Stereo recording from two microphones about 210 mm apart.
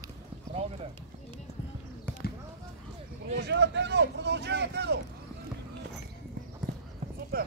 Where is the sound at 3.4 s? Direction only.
55° right (ahead or behind).